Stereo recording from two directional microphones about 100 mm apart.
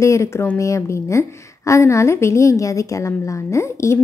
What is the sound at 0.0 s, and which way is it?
A woman's voice, 30° left (ahead or behind).